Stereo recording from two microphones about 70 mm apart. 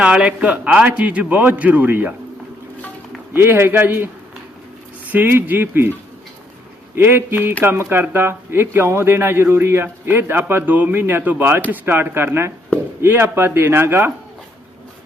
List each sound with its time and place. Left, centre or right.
0.0 s a man's voice: centre
3.3 s a man's voice: right
5.1 s a man's voice: right
6.9 s a man's voice: right